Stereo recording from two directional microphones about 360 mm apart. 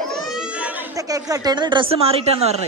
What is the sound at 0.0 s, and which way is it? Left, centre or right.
Speech, centre.